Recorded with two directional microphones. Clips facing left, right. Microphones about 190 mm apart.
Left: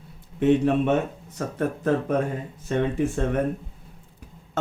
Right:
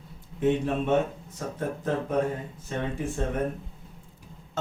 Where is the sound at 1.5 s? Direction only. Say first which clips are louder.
Left 6 dB; 70° left (ahead or behind).